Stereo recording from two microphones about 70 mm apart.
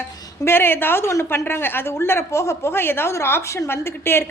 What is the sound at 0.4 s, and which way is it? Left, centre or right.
A woman's voice, left.